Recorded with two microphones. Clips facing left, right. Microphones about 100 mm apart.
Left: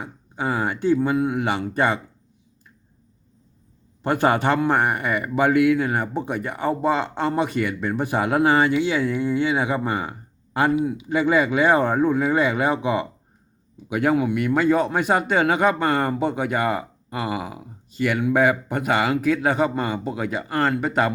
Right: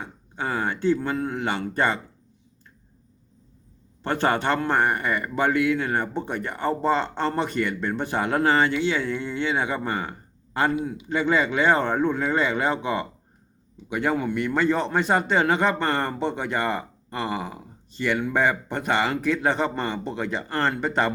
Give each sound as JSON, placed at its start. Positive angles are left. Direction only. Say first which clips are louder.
{"t": 0.0, "sound": "speech", "louder": "left 3 dB", "side_deg": 15}
{"t": 4.0, "sound": "speech", "louder": "left 3 dB", "side_deg": 10}